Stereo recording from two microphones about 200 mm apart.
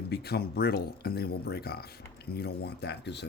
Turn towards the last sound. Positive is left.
turn(degrees=60)  # may be behind; listen again after turning